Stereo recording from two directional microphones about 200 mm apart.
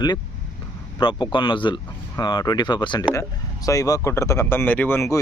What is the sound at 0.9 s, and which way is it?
Speech, 25° left (ahead or behind).